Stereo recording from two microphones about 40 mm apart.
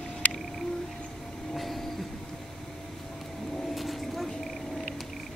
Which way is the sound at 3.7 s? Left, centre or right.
Centre.